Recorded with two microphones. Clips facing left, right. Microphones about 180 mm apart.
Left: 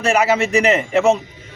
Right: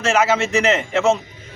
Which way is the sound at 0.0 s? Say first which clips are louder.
Left 1 dB; 15° left (ahead or behind).